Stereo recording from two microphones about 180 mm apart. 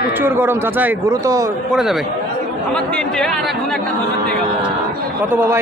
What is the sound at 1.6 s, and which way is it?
A man's voice, centre (ahead or behind).